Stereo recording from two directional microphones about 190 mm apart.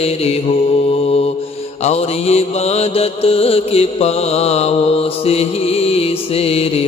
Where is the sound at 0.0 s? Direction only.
35° left (ahead or behind).